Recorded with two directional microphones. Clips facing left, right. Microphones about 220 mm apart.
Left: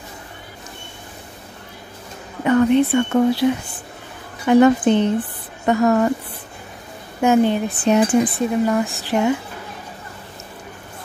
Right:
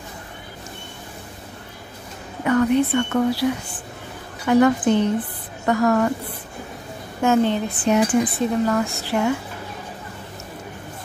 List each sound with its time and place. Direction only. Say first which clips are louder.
2.4 s a woman's voice: left 3 dB; 25° left (ahead or behind)
7.2 s a woman's voice: left 3 dB; 15° left (ahead or behind)